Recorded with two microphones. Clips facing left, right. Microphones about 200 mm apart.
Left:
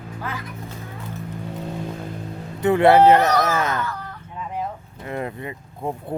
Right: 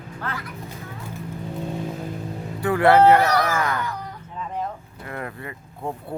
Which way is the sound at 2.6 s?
20° left (ahead or behind).